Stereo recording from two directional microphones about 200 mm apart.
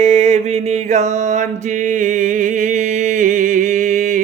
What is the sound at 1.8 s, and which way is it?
Music, 40° right (ahead or behind).